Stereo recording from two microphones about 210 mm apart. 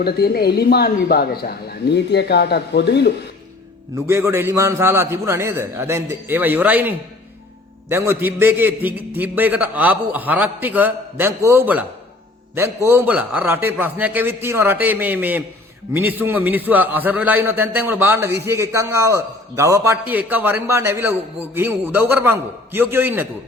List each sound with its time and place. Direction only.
0.0 s speech: 50° left (ahead or behind)
3.9 s a man's voice: 10° right (ahead or behind)